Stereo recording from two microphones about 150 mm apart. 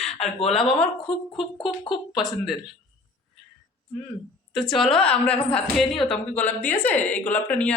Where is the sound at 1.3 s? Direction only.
35° left (ahead or behind).